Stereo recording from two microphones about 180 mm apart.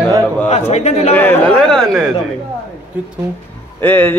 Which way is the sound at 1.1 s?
10° left (ahead or behind).